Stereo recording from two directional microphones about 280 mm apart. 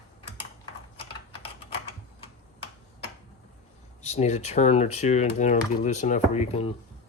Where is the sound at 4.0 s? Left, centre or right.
Left.